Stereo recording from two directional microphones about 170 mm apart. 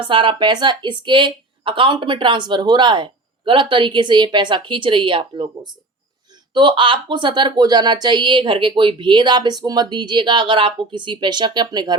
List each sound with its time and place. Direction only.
0.1 s a woman's voice: 30° right (ahead or behind)
6.5 s a woman's voice: 30° right (ahead or behind)